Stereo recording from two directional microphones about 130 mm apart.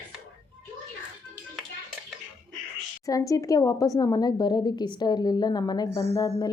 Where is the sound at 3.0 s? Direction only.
25° left (ahead or behind).